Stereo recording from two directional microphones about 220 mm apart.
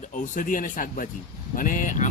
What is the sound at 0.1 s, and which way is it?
Speech, 35° left (ahead or behind).